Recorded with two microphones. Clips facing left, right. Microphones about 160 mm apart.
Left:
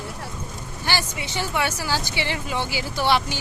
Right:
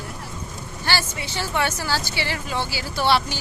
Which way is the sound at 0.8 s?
15° left (ahead or behind).